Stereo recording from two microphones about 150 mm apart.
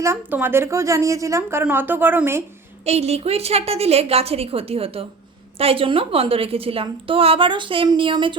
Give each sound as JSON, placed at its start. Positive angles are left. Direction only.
{"t": 0.0, "sound": "speech", "side_deg": -15}
{"t": 2.8, "sound": "a woman's voice", "side_deg": -45}